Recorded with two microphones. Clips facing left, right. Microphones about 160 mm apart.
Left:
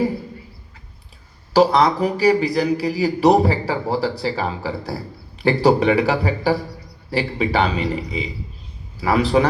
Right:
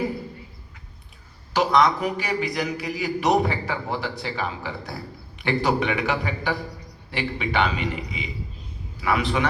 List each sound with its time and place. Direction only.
1.5 s a man's voice: 35° left (ahead or behind)